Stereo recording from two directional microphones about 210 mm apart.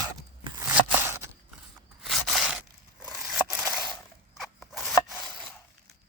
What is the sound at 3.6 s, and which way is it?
Coin, 15° right (ahead or behind).